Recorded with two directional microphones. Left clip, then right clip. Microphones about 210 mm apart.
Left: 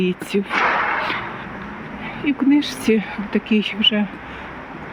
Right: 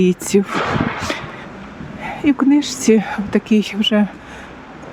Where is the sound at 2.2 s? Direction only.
35° right (ahead or behind).